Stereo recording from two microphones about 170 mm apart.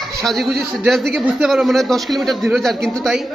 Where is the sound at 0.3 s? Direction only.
Centre (ahead or behind).